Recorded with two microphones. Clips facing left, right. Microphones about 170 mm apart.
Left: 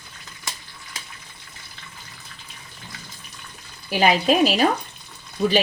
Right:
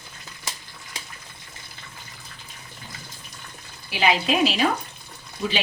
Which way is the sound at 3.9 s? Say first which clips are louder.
Left 4 dB; 45° left (ahead or behind).